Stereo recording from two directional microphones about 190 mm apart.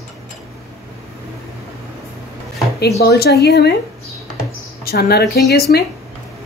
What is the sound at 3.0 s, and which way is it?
Speech, 60° left (ahead or behind).